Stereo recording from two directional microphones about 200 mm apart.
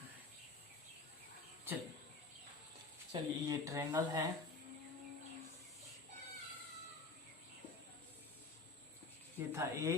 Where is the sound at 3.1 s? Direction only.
15° right (ahead or behind).